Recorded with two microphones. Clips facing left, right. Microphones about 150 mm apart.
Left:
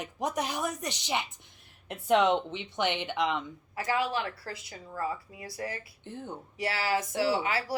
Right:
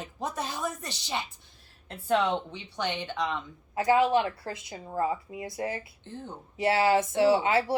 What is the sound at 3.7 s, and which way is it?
Speech, 25° right (ahead or behind).